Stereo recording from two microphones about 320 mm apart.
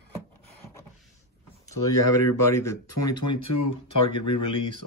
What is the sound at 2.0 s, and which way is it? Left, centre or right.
Speech, left.